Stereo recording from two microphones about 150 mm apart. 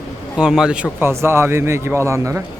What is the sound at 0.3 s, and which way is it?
Speech, 5° right (ahead or behind).